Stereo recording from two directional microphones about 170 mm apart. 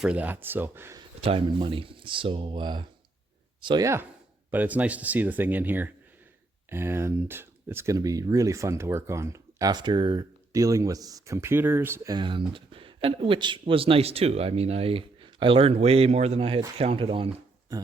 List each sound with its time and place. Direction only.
0.0 s speech: 10° right (ahead or behind)
1.2 s speech: 35° right (ahead or behind)
4.5 s speech: 10° right (ahead or behind)
12.1 s speech: 30° right (ahead or behind)